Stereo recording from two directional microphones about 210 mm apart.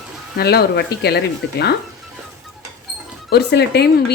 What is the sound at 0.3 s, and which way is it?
A woman's voice, 50° left (ahead or behind).